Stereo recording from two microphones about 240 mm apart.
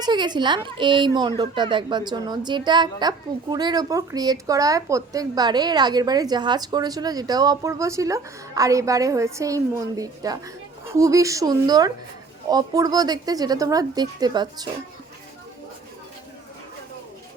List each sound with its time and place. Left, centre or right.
0.0 s speech: centre